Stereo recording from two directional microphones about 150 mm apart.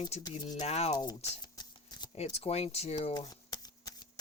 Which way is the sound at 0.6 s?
45° left (ahead or behind).